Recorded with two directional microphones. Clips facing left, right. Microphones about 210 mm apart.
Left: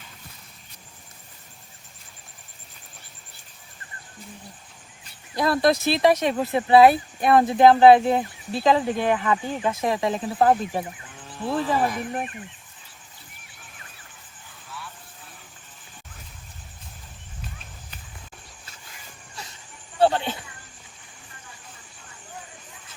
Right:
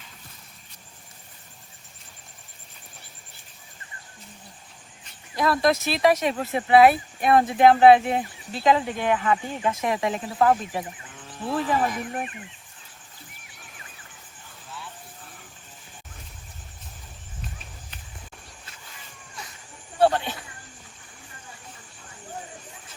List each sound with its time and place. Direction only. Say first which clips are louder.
5.3 s speech: left 1 dB; 30° left (ahead or behind)
20.0 s insect: even; 25° left (ahead or behind)